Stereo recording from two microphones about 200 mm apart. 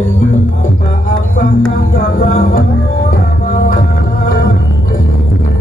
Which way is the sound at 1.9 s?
50° left (ahead or behind).